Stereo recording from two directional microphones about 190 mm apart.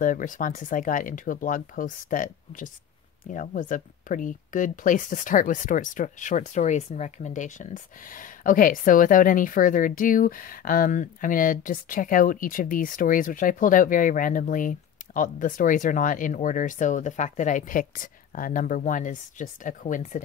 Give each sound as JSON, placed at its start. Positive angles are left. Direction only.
{"t": 0.0, "sound": "speech", "side_deg": 45}